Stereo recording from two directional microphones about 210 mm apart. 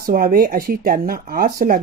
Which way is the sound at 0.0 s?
40° right (ahead or behind).